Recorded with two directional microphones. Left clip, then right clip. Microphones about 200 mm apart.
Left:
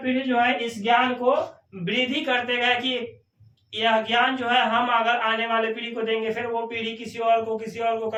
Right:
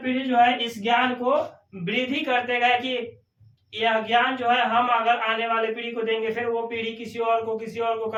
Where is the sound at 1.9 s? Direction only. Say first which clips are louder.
Left 1 dB; 15° left (ahead or behind).